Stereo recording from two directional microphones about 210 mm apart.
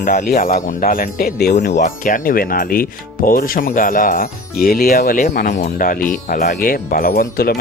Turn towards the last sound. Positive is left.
turn(degrees=45)  # may be behind; listen again after turning